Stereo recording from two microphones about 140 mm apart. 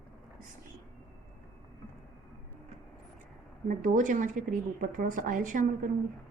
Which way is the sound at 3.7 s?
70° right (ahead or behind).